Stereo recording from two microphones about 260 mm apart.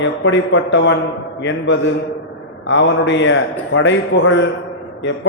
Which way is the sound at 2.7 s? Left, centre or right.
Left.